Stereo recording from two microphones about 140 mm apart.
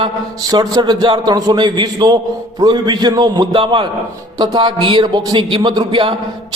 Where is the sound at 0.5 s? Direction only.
30° right (ahead or behind).